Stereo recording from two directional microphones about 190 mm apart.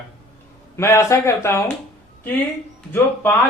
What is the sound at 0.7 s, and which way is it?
Speech, 15° left (ahead or behind).